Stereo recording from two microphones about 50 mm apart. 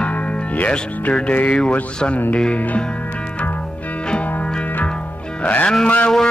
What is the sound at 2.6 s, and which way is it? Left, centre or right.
Mantra, left.